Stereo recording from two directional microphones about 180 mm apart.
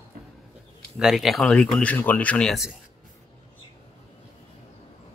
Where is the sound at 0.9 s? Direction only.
Centre (ahead or behind).